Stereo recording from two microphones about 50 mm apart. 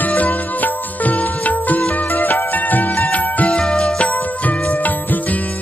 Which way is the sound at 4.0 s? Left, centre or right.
Left.